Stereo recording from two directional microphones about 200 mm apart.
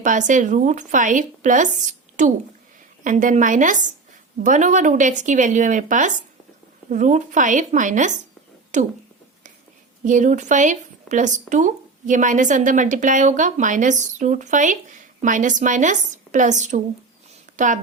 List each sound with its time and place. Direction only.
0.0 s speech: 40° right (ahead or behind)
10.0 s speech: 40° right (ahead or behind)